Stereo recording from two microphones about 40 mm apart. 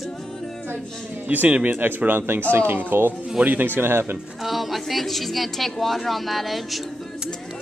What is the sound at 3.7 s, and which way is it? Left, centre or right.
Speech, right.